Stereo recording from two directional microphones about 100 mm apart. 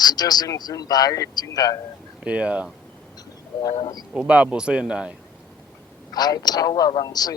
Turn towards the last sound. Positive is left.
turn(degrees=40)  # may be behind; listen again after turning